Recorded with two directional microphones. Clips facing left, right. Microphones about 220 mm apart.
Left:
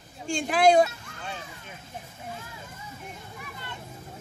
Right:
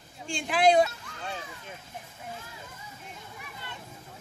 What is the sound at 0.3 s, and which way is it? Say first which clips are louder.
Speech: left 3 dB; 45° left (ahead or behind).